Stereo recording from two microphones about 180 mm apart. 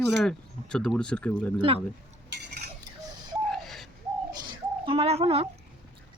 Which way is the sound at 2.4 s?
65° right (ahead or behind).